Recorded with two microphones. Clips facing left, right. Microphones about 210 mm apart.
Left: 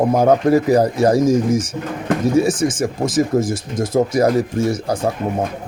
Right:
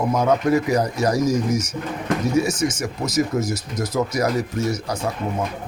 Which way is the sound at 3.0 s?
30° left (ahead or behind).